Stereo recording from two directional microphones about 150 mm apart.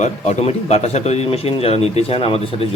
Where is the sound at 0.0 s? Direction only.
45° left (ahead or behind).